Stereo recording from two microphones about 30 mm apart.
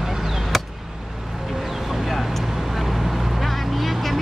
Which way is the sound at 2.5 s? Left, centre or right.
Centre.